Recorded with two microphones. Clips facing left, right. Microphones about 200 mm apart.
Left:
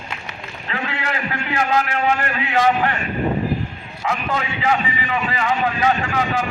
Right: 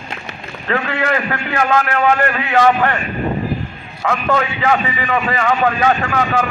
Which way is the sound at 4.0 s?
55° right (ahead or behind).